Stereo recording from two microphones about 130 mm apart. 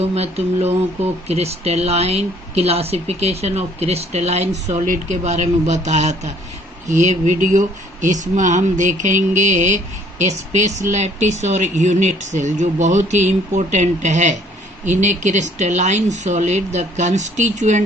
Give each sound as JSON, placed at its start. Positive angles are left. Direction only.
{"t": 0.0, "sound": "speech", "side_deg": -55}